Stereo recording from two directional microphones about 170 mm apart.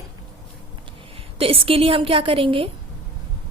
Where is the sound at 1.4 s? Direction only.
35° right (ahead or behind).